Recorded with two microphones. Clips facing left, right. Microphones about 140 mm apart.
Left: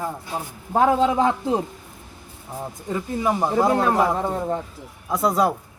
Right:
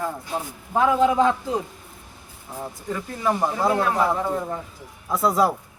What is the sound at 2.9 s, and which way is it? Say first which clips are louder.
Speech: left 2 dB; 15° left (ahead or behind).